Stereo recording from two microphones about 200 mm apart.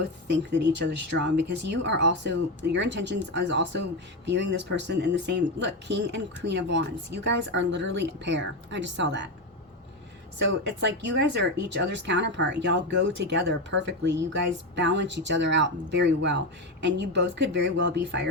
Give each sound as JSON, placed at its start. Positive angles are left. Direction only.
{"t": 0.3, "sound": "speech", "side_deg": -60}
{"t": 10.3, "sound": "speech", "side_deg": -65}